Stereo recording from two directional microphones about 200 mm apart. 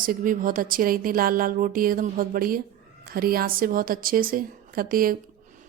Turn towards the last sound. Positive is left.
turn(degrees=-45)  # may be behind; listen again after turning